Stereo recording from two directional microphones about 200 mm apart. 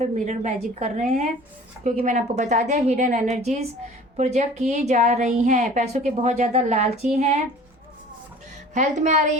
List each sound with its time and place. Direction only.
0.0 s a woman's voice: 35° right (ahead or behind)
8.7 s a woman's voice: 35° right (ahead or behind)